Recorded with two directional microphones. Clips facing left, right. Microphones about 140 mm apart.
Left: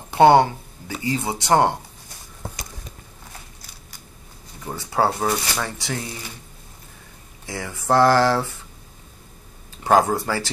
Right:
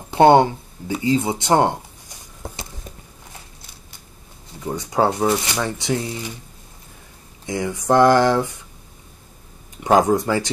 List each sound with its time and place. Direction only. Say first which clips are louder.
0.3 s speech: right 2 dB; 20° right (ahead or behind)
4.7 s speech: right 2 dB; 20° right (ahead or behind)
7.4 s speech: right 4 dB; 20° right (ahead or behind)
9.9 s speech: right 3 dB; 20° right (ahead or behind)